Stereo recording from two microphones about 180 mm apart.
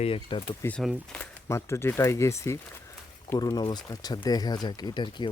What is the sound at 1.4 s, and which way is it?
Speech, 15° left (ahead or behind).